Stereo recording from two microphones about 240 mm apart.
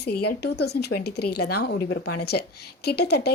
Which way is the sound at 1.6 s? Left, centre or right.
Left.